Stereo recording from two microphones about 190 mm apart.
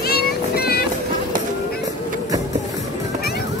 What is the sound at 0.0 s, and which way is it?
Child singing, 55° left (ahead or behind).